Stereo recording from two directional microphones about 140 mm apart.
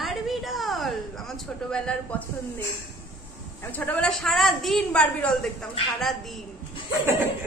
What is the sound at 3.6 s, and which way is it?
A man's voice, 10° left (ahead or behind).